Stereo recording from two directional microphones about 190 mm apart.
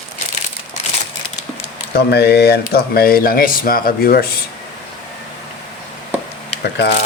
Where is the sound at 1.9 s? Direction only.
60° left (ahead or behind).